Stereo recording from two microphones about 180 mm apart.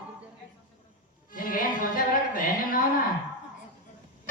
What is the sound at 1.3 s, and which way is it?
Music, 50° left (ahead or behind).